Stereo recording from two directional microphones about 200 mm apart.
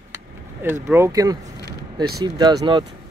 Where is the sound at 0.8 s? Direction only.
10° right (ahead or behind).